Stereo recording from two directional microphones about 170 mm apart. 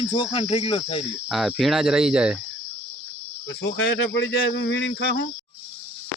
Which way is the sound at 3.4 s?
90° left.